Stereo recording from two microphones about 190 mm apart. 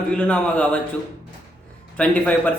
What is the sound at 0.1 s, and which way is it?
Speech, 5° left (ahead or behind).